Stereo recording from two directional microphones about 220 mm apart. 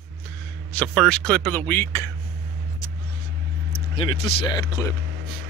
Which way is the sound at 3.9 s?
20° left (ahead or behind).